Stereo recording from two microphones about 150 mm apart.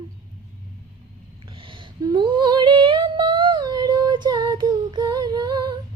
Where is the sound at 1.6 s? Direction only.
35° right (ahead or behind).